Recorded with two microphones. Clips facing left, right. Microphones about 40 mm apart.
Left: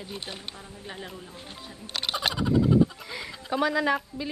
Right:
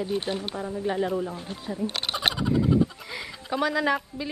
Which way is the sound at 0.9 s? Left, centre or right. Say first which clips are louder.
Right 13 dB; centre.